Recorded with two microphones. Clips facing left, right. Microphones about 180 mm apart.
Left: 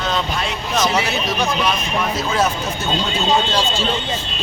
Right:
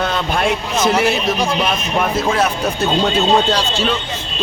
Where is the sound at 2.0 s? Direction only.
50° right (ahead or behind).